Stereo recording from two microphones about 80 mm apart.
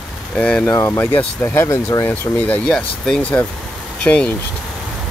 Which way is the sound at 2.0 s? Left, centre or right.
Left.